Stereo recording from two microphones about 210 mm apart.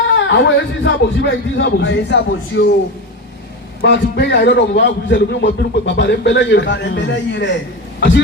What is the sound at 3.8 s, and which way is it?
A man's voice, 55° left (ahead or behind).